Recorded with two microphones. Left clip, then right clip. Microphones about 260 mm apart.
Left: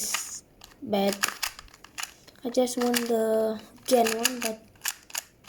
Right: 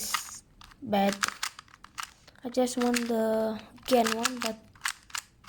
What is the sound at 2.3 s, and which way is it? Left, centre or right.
Speech, right.